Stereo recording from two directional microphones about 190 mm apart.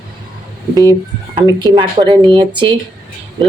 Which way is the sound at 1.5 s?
25° right (ahead or behind).